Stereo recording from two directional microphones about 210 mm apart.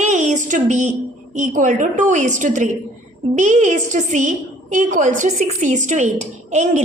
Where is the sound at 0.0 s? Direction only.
35° right (ahead or behind).